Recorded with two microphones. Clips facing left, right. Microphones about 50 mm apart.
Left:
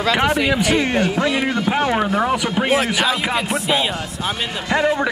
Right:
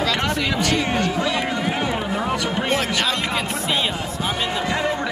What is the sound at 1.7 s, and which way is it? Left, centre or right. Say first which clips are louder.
Speech: left 5 dB; left.